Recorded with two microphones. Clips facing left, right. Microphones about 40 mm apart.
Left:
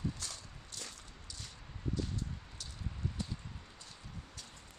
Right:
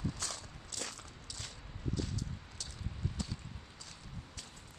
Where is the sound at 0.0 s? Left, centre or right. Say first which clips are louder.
Right 1 dB; right.